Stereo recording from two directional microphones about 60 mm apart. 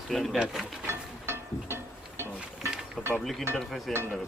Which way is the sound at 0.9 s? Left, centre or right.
Right.